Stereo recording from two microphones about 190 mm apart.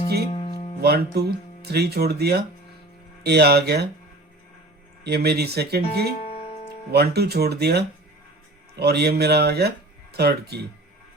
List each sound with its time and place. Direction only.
0.3 s music: 25° left (ahead or behind)
0.8 s speech: 60° right (ahead or behind)
5.0 s speech: 60° right (ahead or behind)
6.2 s music: 30° left (ahead or behind)
6.9 s speech: 60° right (ahead or behind)